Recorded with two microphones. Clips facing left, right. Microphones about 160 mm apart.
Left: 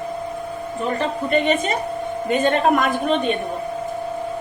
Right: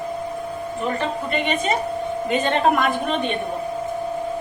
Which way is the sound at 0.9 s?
40° left (ahead or behind).